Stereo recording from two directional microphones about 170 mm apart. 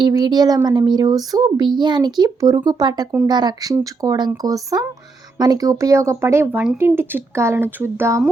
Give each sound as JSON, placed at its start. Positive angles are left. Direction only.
{"t": 0.0, "sound": "speech", "side_deg": -25}